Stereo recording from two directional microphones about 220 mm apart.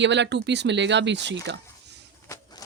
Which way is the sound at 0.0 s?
55° right (ahead or behind).